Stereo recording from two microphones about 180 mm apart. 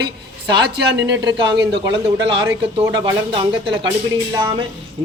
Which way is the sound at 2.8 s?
25° right (ahead or behind).